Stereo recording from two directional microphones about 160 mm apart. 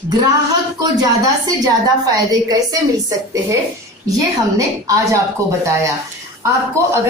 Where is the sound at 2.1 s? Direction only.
20° right (ahead or behind).